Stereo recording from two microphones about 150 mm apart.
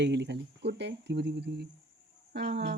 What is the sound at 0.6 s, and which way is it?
Speech, 90° right.